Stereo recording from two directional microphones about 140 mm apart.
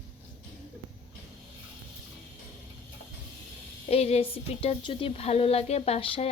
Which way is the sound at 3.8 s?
45° left (ahead or behind).